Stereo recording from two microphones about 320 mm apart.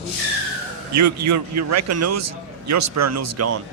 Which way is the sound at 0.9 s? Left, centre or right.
Right.